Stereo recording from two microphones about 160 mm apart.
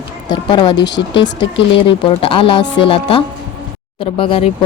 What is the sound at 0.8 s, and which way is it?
Speech, 90° left.